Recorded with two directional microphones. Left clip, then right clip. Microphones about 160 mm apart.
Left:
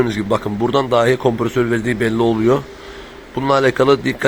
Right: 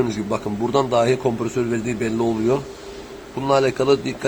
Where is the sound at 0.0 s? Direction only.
15° left (ahead or behind).